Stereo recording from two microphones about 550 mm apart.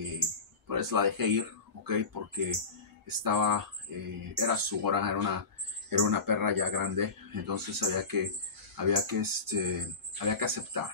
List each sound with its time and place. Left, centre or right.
0.7 s speech: right